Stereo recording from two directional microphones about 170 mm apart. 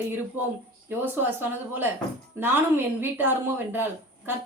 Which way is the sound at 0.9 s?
10° right (ahead or behind).